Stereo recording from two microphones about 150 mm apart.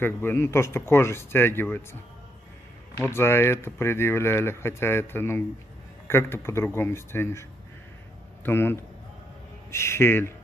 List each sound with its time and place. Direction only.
0.0 s speech: 15° left (ahead or behind)
3.0 s speech: 15° left (ahead or behind)
8.5 s speech: 15° left (ahead or behind)